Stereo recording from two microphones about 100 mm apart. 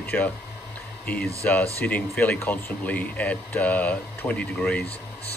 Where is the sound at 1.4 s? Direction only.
15° left (ahead or behind).